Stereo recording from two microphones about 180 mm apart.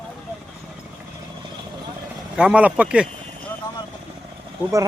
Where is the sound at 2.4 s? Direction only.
5° right (ahead or behind).